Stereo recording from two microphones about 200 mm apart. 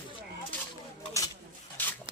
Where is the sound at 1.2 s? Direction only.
15° left (ahead or behind).